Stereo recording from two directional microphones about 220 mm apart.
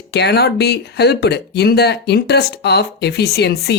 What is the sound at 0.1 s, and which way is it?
Speech, 50° left (ahead or behind).